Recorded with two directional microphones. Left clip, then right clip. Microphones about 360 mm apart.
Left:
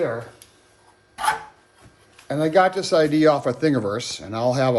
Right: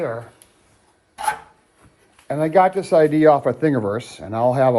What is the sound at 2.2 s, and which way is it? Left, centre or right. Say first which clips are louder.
Speech: right 2 dB; centre.